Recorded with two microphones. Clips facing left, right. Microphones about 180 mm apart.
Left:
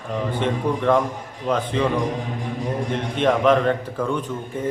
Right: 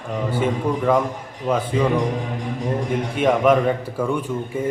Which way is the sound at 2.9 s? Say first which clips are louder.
Right 1 dB; 10° right (ahead or behind).